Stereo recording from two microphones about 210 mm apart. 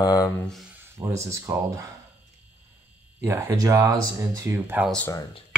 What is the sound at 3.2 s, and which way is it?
Speech, 15° right (ahead or behind).